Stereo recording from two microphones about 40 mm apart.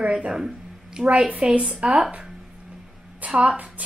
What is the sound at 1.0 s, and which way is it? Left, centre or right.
Speech, right.